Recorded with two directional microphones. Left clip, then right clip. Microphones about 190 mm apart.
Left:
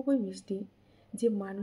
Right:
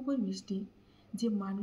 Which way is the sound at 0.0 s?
30° left (ahead or behind).